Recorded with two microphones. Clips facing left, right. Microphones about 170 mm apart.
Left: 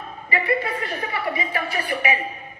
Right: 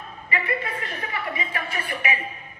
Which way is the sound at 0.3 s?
30° left (ahead or behind).